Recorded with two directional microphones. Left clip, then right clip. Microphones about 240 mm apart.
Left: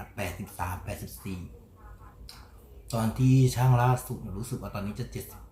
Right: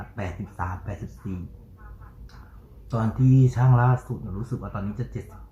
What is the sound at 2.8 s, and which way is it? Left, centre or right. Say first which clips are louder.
Speech: right 3 dB; left.